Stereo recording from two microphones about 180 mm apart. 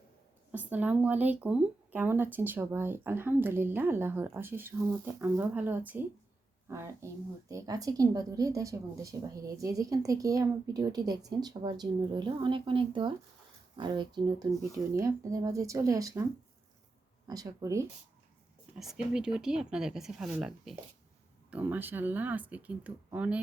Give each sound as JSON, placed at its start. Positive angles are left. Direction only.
{"t": 0.5, "sound": "a woman's voice", "side_deg": -10}
{"t": 17.2, "sound": "a woman's voice", "side_deg": -20}
{"t": 18.8, "sound": "speech", "side_deg": -5}